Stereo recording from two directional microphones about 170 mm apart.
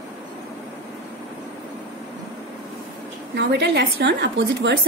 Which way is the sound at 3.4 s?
90° right.